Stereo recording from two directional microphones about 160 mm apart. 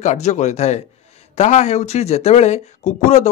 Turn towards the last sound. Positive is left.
turn(degrees=45)  # may be behind; listen again after turning